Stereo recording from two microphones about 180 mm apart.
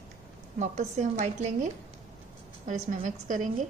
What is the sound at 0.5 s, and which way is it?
A woman's voice, 40° right (ahead or behind).